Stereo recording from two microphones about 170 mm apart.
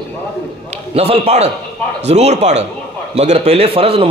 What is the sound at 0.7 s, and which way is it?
A man's voice, 35° right (ahead or behind).